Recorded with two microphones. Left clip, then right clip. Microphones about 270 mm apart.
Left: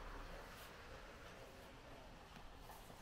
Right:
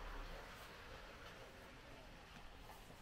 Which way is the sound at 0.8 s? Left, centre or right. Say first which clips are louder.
Right 1 dB; centre.